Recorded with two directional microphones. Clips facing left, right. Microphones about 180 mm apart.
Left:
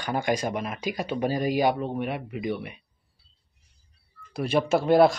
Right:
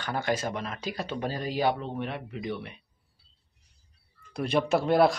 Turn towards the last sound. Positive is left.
turn(degrees=0)  # may be behind; listen again after turning